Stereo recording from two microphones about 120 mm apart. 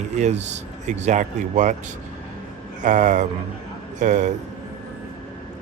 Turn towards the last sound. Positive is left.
turn(degrees=-90)